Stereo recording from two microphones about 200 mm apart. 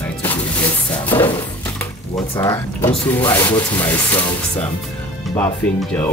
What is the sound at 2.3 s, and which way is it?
Speech, 15° left (ahead or behind).